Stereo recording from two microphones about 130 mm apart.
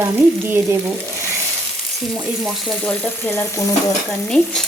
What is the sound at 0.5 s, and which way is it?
Frying, 15° right (ahead or behind).